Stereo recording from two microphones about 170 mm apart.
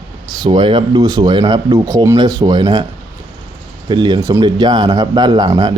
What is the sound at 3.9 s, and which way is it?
Speech, 25° right (ahead or behind).